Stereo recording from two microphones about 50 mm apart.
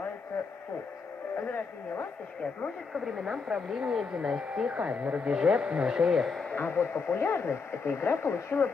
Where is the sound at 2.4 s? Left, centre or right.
Left.